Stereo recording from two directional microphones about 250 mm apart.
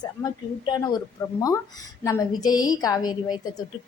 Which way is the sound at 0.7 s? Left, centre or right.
Centre.